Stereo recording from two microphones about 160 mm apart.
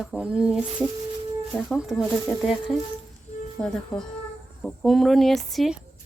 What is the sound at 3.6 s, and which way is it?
Speech, 10° left (ahead or behind).